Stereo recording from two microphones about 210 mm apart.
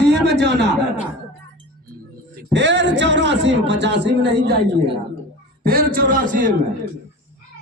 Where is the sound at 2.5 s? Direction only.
55° right (ahead or behind).